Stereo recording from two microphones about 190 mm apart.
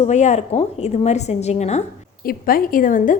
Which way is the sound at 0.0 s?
35° left (ahead or behind).